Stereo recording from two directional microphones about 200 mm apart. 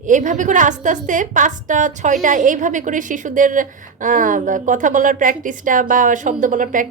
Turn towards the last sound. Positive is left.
turn(degrees=-40)  # may be behind; listen again after turning